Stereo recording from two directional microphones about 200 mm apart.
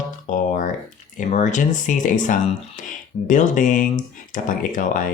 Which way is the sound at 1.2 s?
35° left (ahead or behind).